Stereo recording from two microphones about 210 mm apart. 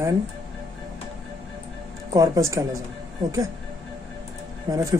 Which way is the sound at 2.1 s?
15° right (ahead or behind).